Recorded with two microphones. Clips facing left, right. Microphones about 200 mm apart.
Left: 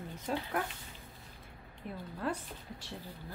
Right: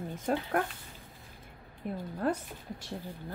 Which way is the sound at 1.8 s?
45° right (ahead or behind).